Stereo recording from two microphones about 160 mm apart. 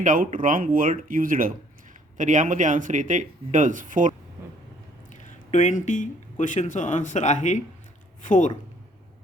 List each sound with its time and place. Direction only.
0.0 s speech: 55° right (ahead or behind)
5.5 s speech: 50° left (ahead or behind)